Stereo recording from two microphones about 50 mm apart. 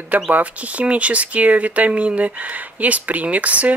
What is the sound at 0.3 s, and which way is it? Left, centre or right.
Speech, right.